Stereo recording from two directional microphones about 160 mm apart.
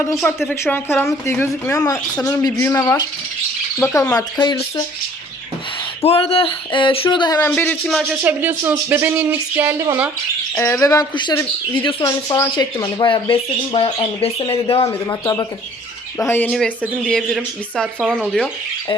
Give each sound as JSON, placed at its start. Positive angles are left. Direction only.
{"t": 0.6, "sound": "speech", "side_deg": 15}
{"t": 6.0, "sound": "speech", "side_deg": 35}
{"t": 7.3, "sound": "speech", "side_deg": 10}
{"t": 8.2, "sound": "speech", "side_deg": -10}
{"t": 10.5, "sound": "speech", "side_deg": 15}
{"t": 14.8, "sound": "speech", "side_deg": 20}